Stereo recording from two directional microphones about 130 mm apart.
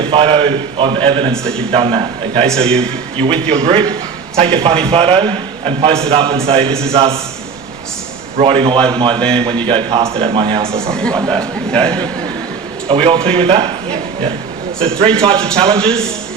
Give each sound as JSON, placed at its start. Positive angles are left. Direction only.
{"t": 0.1, "sound": "a man's voice", "side_deg": -45}
{"t": 1.3, "sound": "a man's voice", "side_deg": 5}
{"t": 1.7, "sound": "a man's voice", "side_deg": -45}
{"t": 2.6, "sound": "a man's voice", "side_deg": 5}
{"t": 3.5, "sound": "a man's voice", "side_deg": -50}
{"t": 6.7, "sound": "a man's voice", "side_deg": 5}
{"t": 6.9, "sound": "a man's voice", "side_deg": -45}
{"t": 8.4, "sound": "a man's voice", "side_deg": -45}
{"t": 10.6, "sound": "a man's voice", "side_deg": -20}
{"t": 10.9, "sound": "a man's voice", "side_deg": 5}
{"t": 12.9, "sound": "a man's voice", "side_deg": -45}
{"t": 14.8, "sound": "a man's voice", "side_deg": -45}
{"t": 15.4, "sound": "a man's voice", "side_deg": 5}